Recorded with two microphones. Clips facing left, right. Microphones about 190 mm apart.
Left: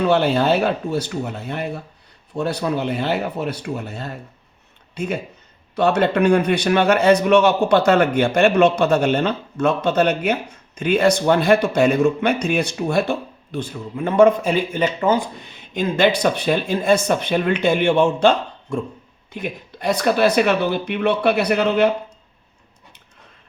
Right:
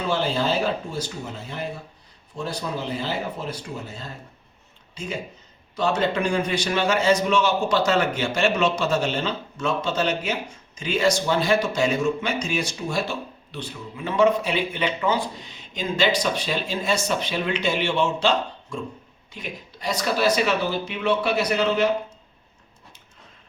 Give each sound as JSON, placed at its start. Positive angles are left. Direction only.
{"t": 0.0, "sound": "a man's voice", "side_deg": 65}